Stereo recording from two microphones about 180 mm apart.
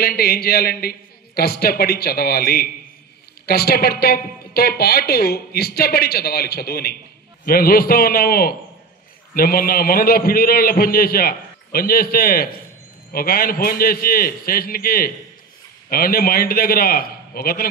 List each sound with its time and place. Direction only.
0.0 s a woman's voice: 60° left (ahead or behind)